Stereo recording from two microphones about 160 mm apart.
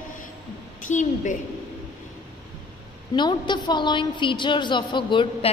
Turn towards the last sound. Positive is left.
turn(degrees=30)  # may be behind; listen again after turning